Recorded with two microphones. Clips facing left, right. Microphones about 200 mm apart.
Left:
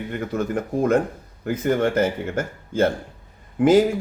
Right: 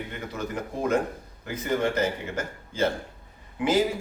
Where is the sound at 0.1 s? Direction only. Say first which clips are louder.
Left 8 dB; 50° left (ahead or behind).